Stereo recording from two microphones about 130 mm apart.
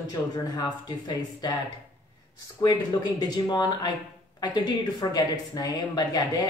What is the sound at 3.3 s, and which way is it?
Speech, 30° left (ahead or behind).